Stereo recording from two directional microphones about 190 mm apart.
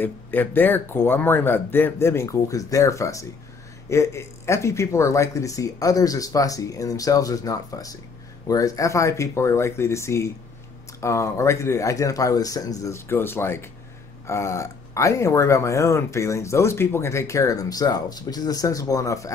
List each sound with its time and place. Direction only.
0.0 s speech: 10° left (ahead or behind)